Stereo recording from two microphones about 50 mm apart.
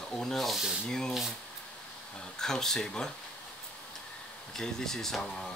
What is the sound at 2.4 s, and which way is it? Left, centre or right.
Speech, centre.